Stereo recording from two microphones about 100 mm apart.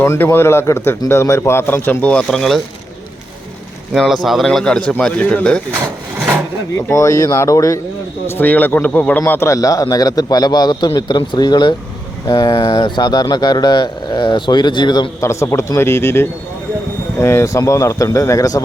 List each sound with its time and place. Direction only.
0.0 s speech: 25° left (ahead or behind); by 2.6 s 5° left (ahead or behind)
3.9 s a man's voice: centre (ahead or behind)
6.9 s a man's voice: 30° left (ahead or behind)
8.3 s a man's voice: 15° left (ahead or behind); by 15.1 s 50° left (ahead or behind)
15.2 s a man's voice: 30° left (ahead or behind)